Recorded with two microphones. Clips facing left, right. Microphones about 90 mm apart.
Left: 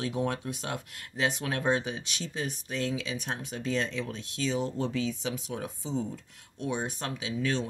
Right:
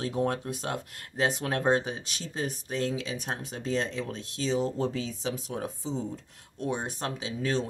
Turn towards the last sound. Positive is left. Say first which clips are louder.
# right 1 dB
turn(degrees=-35)  # may be behind; listen again after turning